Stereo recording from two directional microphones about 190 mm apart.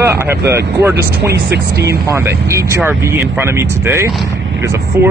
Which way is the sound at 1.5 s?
60° right (ahead or behind).